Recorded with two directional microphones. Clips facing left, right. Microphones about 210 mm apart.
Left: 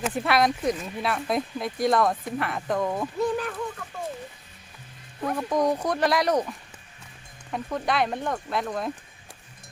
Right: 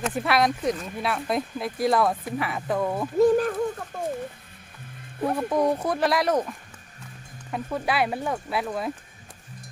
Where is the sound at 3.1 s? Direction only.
45° right (ahead or behind).